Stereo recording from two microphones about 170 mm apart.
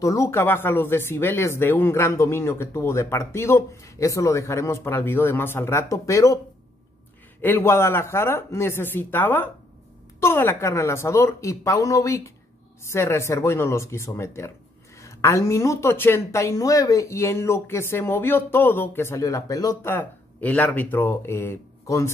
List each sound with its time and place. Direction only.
0.0 s speech: 15° left (ahead or behind)
7.4 s speech: 15° left (ahead or behind)